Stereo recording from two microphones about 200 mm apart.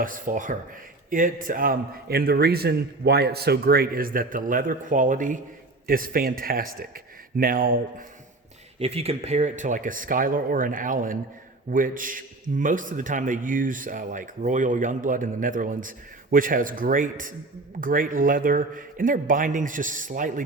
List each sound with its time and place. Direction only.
0.0 s a man's voice: 40° right (ahead or behind)
8.8 s a man's voice: 30° right (ahead or behind)